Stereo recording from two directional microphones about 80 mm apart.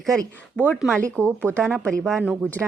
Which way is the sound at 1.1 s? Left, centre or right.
Centre.